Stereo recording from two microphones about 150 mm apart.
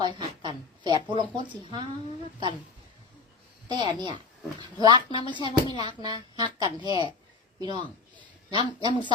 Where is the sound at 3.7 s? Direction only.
30° right (ahead or behind).